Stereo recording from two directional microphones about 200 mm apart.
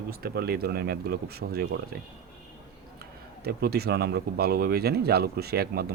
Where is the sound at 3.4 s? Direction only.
50° right (ahead or behind).